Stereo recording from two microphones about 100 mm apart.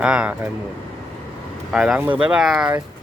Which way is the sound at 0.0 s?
10° right (ahead or behind).